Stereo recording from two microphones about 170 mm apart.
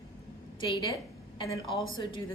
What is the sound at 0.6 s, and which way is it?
Speech, 30° left (ahead or behind).